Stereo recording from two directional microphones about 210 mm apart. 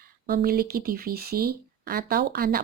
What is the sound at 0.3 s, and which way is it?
Speech, 45° right (ahead or behind).